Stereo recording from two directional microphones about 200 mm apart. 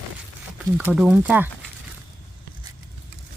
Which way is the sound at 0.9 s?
5° right (ahead or behind).